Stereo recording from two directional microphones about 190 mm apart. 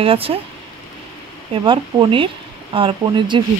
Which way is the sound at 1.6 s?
25° right (ahead or behind).